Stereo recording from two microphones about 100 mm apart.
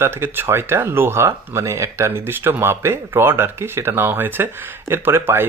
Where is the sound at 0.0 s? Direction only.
20° right (ahead or behind).